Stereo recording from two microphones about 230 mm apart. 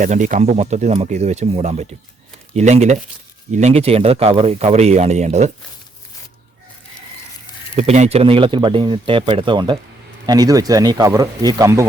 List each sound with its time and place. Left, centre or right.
0.0 s speech: right
7.8 s speech: right; by 11.9 s centre